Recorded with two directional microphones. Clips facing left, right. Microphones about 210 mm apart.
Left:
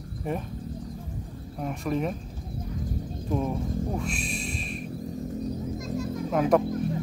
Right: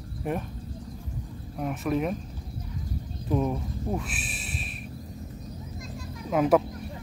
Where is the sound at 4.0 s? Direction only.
5° right (ahead or behind).